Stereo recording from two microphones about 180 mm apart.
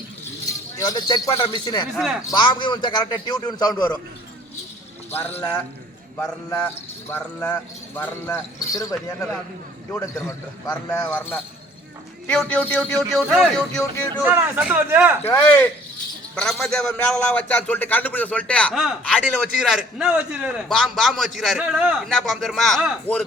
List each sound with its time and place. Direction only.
0.8 s a man's voice: 20° left (ahead or behind)
2.0 s a man's voice: 5° right (ahead or behind)
2.3 s a man's voice: 25° left (ahead or behind)
5.1 s a man's voice: 10° left (ahead or behind); by 15.1 s 10° right (ahead or behind)
15.3 s a man's voice: 10° left (ahead or behind)